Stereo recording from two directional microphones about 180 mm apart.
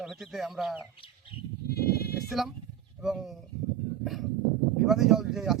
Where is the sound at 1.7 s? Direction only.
60° left (ahead or behind).